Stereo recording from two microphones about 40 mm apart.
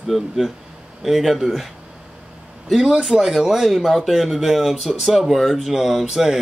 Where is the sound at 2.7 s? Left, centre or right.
Centre.